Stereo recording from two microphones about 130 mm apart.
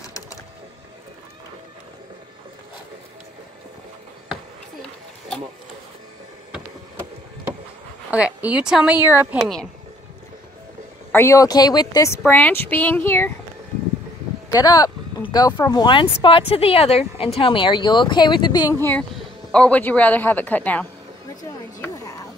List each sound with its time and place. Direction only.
8.1 s speech: 10° right (ahead or behind)
9.4 s speech: centre (ahead or behind)
11.1 s speech: 20° left (ahead or behind)
12.3 s speech: 15° left (ahead or behind)
14.5 s a sound: 30° left (ahead or behind)
15.5 s speech: 25° left (ahead or behind)
18.8 s speech: 15° left (ahead or behind)
21.7 s a sound: 25° left (ahead or behind)